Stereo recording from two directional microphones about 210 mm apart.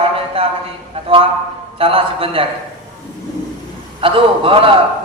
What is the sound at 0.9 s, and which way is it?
A man's voice, 25° right (ahead or behind).